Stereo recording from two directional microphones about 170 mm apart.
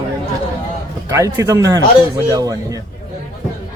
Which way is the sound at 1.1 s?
20° right (ahead or behind).